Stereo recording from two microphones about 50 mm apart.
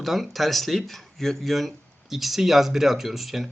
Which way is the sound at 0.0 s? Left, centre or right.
Centre.